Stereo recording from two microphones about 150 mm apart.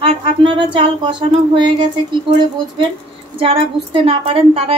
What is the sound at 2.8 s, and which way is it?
A woman's voice, 35° right (ahead or behind).